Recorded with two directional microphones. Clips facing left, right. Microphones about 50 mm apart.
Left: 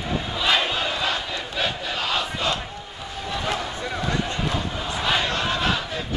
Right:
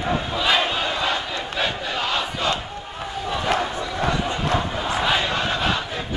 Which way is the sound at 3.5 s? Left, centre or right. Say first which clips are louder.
Right 4 dB; right.